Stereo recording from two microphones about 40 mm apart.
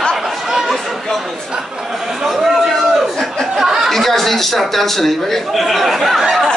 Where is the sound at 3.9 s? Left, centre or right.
Centre.